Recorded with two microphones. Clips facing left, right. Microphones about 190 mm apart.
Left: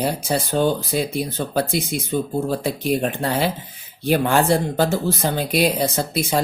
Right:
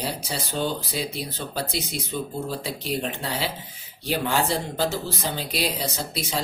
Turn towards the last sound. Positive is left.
turn(degrees=50)  # may be behind; listen again after turning